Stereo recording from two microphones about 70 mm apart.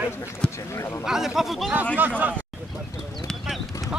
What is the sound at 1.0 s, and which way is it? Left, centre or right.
Speech, centre.